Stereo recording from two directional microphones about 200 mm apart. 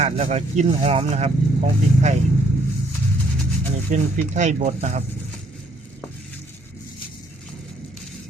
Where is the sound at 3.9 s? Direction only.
35° right (ahead or behind).